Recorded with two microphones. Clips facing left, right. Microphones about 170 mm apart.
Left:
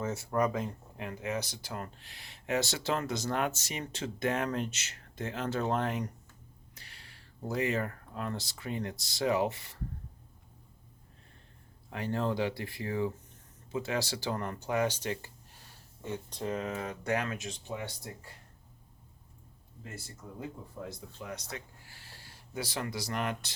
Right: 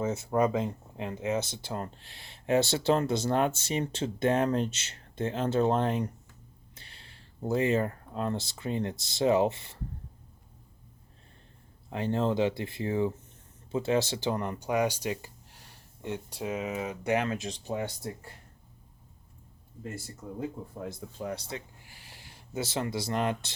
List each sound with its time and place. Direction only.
0.0 s speech: 20° right (ahead or behind)
11.9 s speech: 25° right (ahead or behind); by 17.0 s 5° right (ahead or behind)
17.1 s speech: 25° right (ahead or behind); by 17.9 s 40° right (ahead or behind)
20.8 s speech: 55° right (ahead or behind)
21.2 s speech: 35° right (ahead or behind)
21.5 s speech: 15° right (ahead or behind)